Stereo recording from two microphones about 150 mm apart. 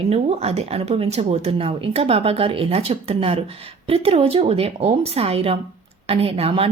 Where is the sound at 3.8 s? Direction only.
40° right (ahead or behind).